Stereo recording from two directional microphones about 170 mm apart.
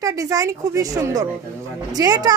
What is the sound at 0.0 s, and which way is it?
A woman's voice, 20° right (ahead or behind).